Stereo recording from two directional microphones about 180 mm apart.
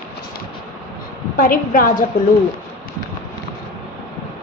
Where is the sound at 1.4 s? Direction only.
45° left (ahead or behind).